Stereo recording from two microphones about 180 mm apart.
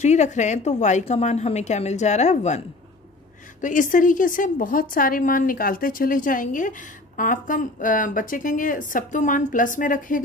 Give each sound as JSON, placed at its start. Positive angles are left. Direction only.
{"t": 0.0, "sound": "a woman's voice", "side_deg": 40}
{"t": 3.6, "sound": "a woman's voice", "side_deg": 45}